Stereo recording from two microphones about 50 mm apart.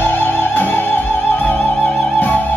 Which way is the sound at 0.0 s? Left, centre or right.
Left.